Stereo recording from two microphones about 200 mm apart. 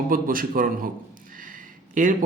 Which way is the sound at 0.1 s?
45° right (ahead or behind).